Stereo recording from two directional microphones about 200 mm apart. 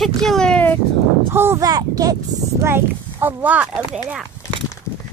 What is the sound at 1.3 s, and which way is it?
Speech, 10° right (ahead or behind).